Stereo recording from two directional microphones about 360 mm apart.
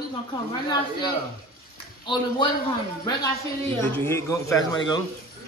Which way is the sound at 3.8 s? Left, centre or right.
Centre.